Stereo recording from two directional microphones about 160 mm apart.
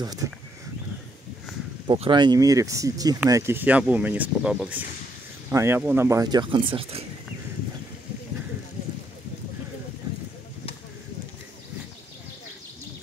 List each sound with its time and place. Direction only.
1.9 s speech: 30° right (ahead or behind)